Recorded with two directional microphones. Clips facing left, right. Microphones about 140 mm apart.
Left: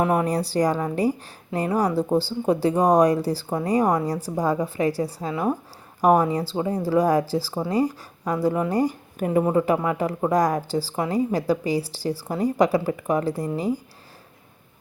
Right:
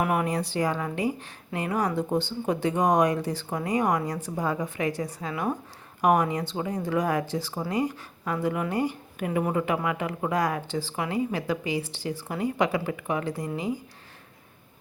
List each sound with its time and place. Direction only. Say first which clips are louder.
0.0 s a woman's voice: left 4 dB; 30° left (ahead or behind)